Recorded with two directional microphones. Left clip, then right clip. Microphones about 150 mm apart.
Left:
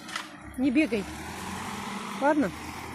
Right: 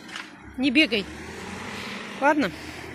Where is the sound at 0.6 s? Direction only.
5° left (ahead or behind).